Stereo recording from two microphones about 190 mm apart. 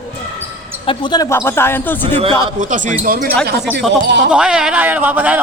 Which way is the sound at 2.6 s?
40° right (ahead or behind).